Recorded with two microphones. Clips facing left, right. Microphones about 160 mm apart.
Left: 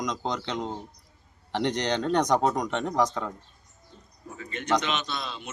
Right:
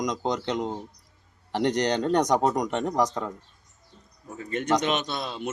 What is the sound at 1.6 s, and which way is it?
Speech, 40° right (ahead or behind).